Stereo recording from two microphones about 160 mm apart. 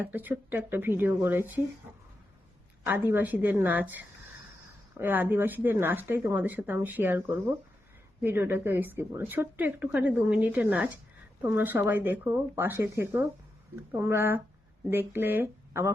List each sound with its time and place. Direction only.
0.0 s a woman's voice: 10° right (ahead or behind)
2.8 s a woman's voice: 15° right (ahead or behind)